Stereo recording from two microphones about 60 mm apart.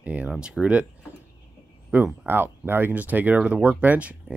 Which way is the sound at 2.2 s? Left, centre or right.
Right.